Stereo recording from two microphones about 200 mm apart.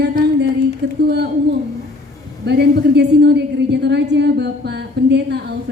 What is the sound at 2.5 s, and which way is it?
A man's voice, 55° right (ahead or behind).